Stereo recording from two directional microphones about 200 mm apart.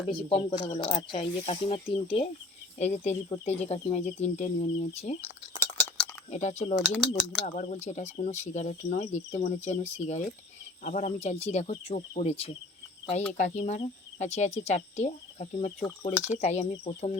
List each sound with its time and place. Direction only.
0.1 s speech: 30° left (ahead or behind)
5.5 s a sound: 10° left (ahead or behind)
6.3 s speech: 35° left (ahead or behind)
6.7 s speech: centre (ahead or behind)
7.4 s speech: 40° left (ahead or behind)
16.1 s speech: 10° right (ahead or behind)
16.4 s speech: 30° left (ahead or behind)